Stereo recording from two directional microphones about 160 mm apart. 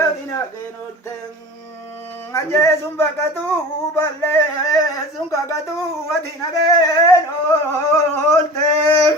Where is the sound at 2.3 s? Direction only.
20° left (ahead or behind).